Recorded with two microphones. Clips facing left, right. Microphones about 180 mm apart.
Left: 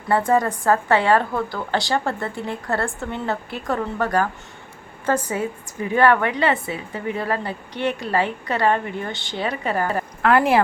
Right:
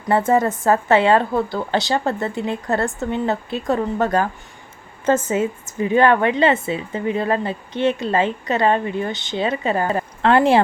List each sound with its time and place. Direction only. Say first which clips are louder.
0.1 s a woman's voice: right 2 dB; 20° right (ahead or behind)